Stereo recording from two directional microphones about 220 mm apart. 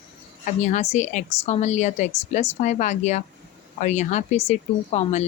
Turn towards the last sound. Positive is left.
turn(degrees=30)  # may be behind; listen again after turning